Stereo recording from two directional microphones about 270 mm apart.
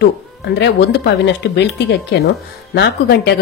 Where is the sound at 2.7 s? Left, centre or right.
Left.